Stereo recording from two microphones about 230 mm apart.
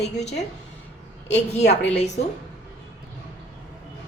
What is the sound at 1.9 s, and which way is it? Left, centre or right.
Speech, left.